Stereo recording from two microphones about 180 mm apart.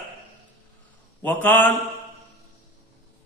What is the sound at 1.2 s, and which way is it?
Speech, 10° left (ahead or behind).